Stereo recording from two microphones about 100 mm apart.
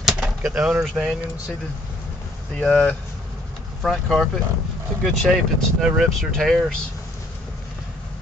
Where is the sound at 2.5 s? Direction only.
10° left (ahead or behind).